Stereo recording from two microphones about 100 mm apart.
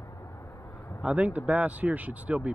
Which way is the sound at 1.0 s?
15° right (ahead or behind).